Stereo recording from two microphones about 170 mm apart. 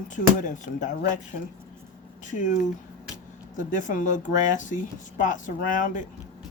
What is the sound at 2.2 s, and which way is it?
Speech, 45° left (ahead or behind).